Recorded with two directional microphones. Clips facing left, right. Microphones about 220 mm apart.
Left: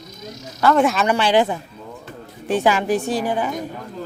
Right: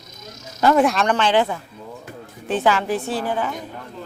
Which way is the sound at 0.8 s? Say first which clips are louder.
Even; centre (ahead or behind).